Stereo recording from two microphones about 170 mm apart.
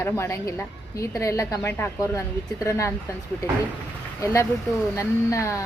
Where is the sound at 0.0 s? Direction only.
15° left (ahead or behind).